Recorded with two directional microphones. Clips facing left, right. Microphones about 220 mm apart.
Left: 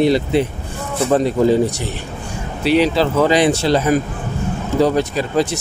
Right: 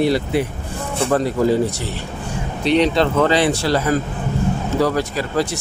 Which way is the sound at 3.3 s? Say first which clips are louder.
Left 3 dB; 20° left (ahead or behind).